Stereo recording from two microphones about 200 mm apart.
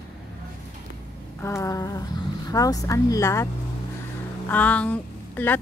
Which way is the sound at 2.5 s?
20° left (ahead or behind).